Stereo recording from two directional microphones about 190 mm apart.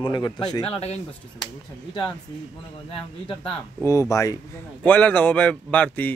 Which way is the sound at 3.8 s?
15° left (ahead or behind).